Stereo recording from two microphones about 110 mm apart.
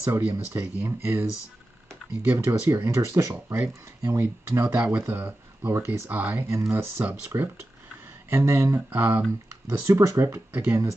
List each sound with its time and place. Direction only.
0.0 s speech: 25° right (ahead or behind)
2.2 s speech: 20° right (ahead or behind)
3.3 s speech: 15° right (ahead or behind)
4.0 s speech: 25° right (ahead or behind)
4.7 s speech: 10° right (ahead or behind)
5.0 s speech: 20° right (ahead or behind)
9.7 s speech: 25° right (ahead or behind)